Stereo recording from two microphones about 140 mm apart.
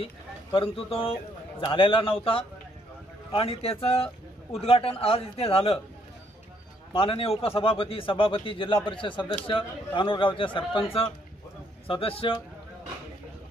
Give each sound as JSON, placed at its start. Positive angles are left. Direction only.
{"t": 0.0, "sound": "a man's voice", "side_deg": 40}
{"t": 6.9, "sound": "a man's voice", "side_deg": 40}
{"t": 11.9, "sound": "a man's voice", "side_deg": 40}